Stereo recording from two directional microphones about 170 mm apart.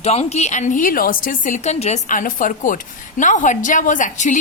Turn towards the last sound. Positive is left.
turn(degrees=45)  # may be behind; listen again after turning